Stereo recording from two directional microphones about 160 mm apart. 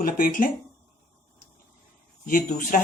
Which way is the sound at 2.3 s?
60° left (ahead or behind).